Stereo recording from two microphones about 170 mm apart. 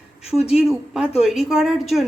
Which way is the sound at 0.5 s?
5° right (ahead or behind).